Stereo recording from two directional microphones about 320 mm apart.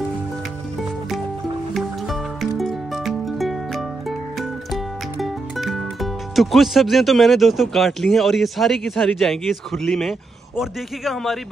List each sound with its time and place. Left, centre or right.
1.7 s music: centre
5.2 s speech: centre